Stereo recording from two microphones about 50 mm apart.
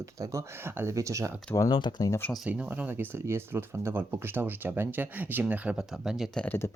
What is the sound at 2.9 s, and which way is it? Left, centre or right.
Speech, right.